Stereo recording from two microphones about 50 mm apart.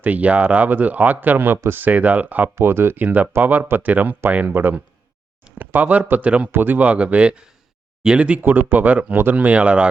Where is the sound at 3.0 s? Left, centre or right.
Right.